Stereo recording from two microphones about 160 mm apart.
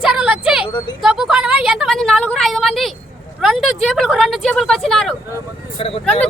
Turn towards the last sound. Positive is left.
turn(degrees=40)  # may be behind; listen again after turning